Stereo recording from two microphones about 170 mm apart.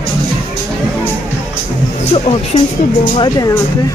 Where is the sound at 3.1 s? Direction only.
25° left (ahead or behind).